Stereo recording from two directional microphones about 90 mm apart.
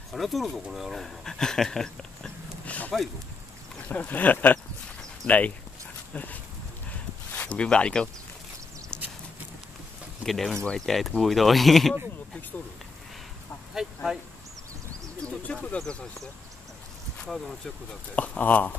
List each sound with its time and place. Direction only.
0.1 s speech: centre (ahead or behind); by 2.9 s 15° left (ahead or behind)
3.9 s speech: 20° left (ahead or behind)
10.2 s speech: centre (ahead or behind)
15.2 s speech: 15° left (ahead or behind)